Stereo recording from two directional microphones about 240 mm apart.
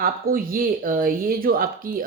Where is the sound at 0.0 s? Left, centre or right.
Right.